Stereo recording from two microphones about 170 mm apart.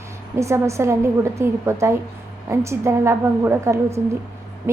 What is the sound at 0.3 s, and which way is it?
A woman's voice, 15° right (ahead or behind).